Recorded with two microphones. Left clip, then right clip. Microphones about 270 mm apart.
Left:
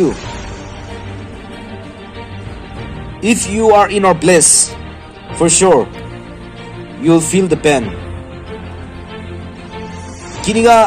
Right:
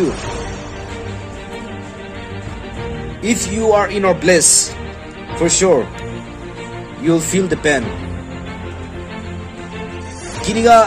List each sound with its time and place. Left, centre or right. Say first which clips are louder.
3.2 s speech: left 5 dB; left
7.1 s speech: left 4 dB; left
10.4 s speech: left 1 dB; left